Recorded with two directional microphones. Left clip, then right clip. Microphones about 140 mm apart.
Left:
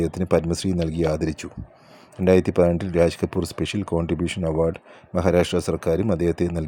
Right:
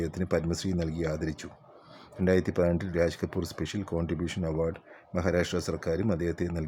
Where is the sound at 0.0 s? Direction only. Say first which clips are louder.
Left 8 dB; 30° left (ahead or behind).